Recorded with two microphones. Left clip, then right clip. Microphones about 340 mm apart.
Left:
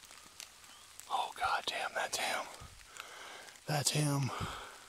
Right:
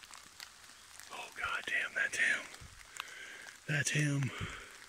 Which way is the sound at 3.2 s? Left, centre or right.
Left.